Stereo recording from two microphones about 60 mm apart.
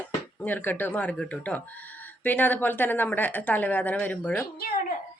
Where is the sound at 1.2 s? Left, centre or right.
Centre.